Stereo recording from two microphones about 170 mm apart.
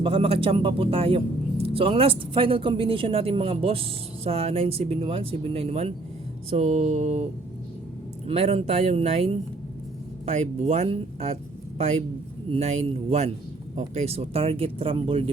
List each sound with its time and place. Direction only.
0.0 s speech: 30° right (ahead or behind)
8.3 s speech: 35° right (ahead or behind)